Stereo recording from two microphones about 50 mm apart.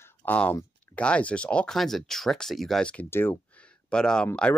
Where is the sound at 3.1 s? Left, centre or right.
Left.